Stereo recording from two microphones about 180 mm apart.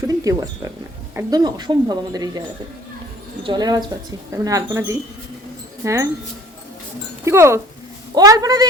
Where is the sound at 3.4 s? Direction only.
25° right (ahead or behind).